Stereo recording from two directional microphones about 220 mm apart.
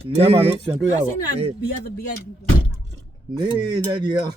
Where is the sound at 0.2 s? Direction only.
25° right (ahead or behind).